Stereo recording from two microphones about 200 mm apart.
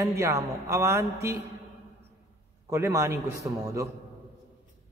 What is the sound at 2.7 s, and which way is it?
A man's voice, 15° right (ahead or behind).